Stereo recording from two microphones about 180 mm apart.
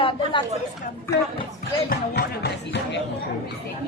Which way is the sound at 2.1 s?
70° left (ahead or behind).